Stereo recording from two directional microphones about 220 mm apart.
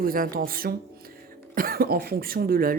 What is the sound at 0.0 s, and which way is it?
Speech, 40° right (ahead or behind).